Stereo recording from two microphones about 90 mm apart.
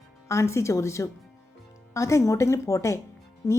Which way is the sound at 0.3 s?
30° left (ahead or behind).